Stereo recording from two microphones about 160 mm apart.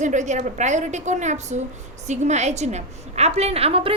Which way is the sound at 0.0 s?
50° right (ahead or behind).